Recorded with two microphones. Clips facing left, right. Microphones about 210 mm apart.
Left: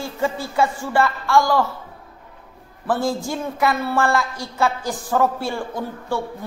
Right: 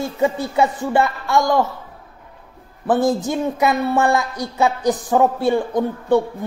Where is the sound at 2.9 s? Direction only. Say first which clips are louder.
Right 5 dB; 20° right (ahead or behind).